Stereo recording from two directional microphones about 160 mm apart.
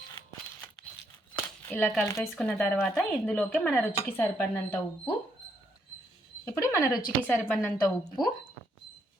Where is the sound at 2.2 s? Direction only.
Centre (ahead or behind).